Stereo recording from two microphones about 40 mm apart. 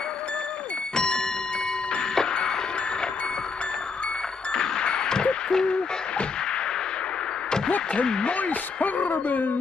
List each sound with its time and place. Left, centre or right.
2.1 s music: centre
4.5 s ding: left
7.9 s speech: left
8.4 s speech: left